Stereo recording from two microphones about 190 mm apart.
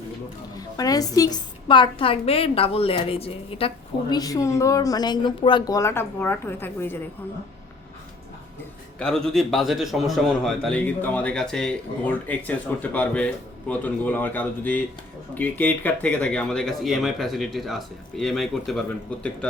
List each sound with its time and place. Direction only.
0.5 s a woman's voice: 20° left (ahead or behind)
4.1 s a man's voice: 20° left (ahead or behind)
9.0 s a man's voice: 5° left (ahead or behind)